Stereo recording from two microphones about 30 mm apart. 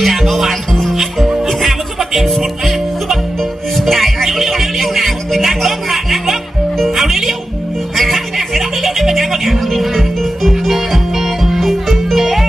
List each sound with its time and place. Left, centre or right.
0.0 s music: centre